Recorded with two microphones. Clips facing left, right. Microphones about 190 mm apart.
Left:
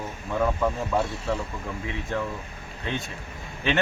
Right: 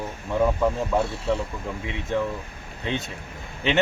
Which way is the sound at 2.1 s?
20° right (ahead or behind).